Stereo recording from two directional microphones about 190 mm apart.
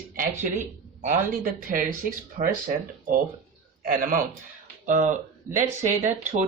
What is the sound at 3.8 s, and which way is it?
Speech, 45° right (ahead or behind).